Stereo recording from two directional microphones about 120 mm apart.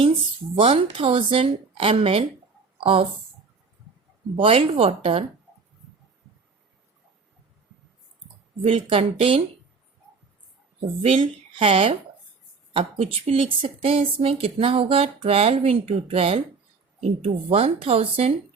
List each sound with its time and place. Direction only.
0.6 s speech: 50° right (ahead or behind)
4.4 s speech: 50° right (ahead or behind)
8.6 s speech: 55° right (ahead or behind)
10.8 s a woman's voice: 50° right (ahead or behind)